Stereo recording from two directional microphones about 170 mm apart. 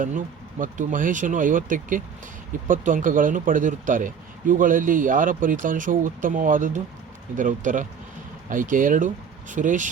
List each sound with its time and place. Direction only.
0.6 s speech: 50° right (ahead or behind)